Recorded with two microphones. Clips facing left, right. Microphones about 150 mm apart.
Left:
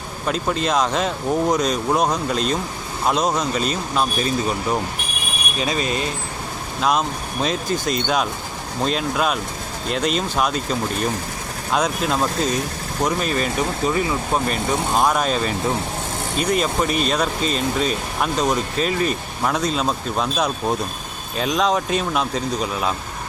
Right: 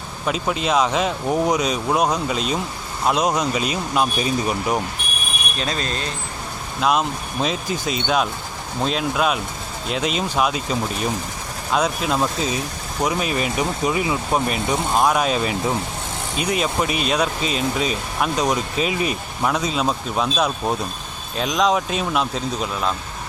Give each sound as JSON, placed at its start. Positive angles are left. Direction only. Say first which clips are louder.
{"t": 0.3, "sound": "speech", "louder": "even", "side_deg": -5}
{"t": 5.5, "sound": "speech", "louder": "left 4 dB", "side_deg": 5}
{"t": 7.4, "sound": "speech", "louder": "left 2 dB", "side_deg": 0}